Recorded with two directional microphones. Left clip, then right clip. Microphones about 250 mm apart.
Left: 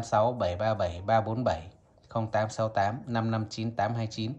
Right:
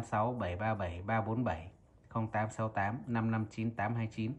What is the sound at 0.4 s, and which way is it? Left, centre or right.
Speech, centre.